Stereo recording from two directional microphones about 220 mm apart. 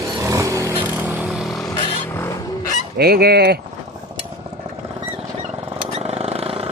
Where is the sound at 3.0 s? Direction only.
45° right (ahead or behind).